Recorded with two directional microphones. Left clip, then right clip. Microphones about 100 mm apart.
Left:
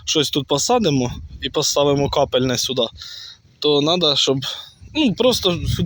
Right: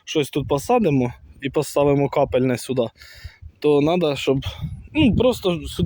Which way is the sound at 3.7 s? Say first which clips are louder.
Left 3 dB; 25° right (ahead or behind).